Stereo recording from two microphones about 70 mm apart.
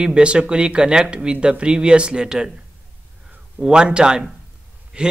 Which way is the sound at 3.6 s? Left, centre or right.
Centre.